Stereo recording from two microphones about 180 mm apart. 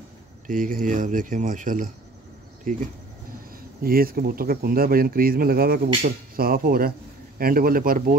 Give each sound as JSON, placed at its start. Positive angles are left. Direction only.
{"t": 0.5, "sound": "speech", "side_deg": -50}